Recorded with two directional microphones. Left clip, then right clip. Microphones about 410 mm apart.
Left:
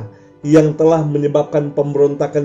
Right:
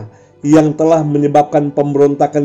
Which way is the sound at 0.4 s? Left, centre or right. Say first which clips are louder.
Right 1 dB; centre.